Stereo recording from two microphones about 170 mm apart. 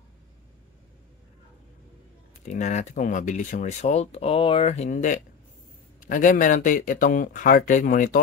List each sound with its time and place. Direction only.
2.4 s speech: 45° left (ahead or behind)